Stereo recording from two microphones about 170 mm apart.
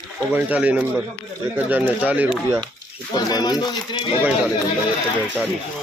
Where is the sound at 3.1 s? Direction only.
25° left (ahead or behind).